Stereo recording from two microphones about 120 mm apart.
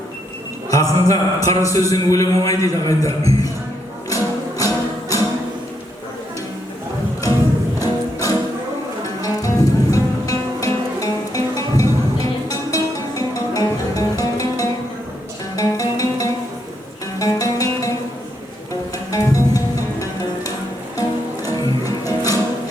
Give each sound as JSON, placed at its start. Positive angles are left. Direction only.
{"t": 0.7, "sound": "a man's voice", "side_deg": 30}
{"t": 4.1, "sound": "music", "side_deg": 30}
{"t": 7.8, "sound": "music", "side_deg": 30}
{"t": 19.1, "sound": "music", "side_deg": 30}